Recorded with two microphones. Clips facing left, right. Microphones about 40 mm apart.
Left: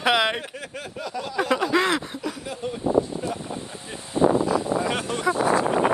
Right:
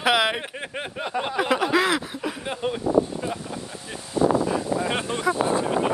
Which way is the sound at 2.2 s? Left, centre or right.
Right.